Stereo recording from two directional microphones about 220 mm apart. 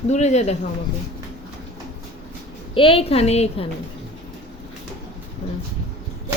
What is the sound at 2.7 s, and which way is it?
Speech, 25° left (ahead or behind).